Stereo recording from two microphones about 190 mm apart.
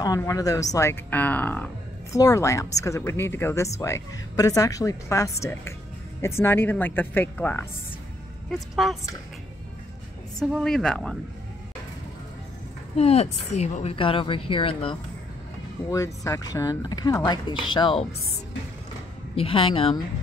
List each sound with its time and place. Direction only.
0.0 s a woman's voice: 20° left (ahead or behind)
8.5 s speech: centre (ahead or behind)
10.4 s speech: centre (ahead or behind)
12.9 s a woman's voice: 35° left (ahead or behind)
15.9 s a woman's voice: 15° left (ahead or behind)
19.3 s a woman's voice: 30° left (ahead or behind)